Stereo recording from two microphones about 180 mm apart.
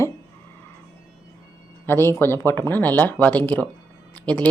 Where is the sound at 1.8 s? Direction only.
15° left (ahead or behind).